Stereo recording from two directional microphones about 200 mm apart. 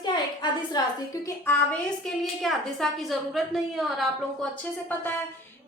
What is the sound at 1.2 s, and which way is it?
A woman's voice, 10° left (ahead or behind).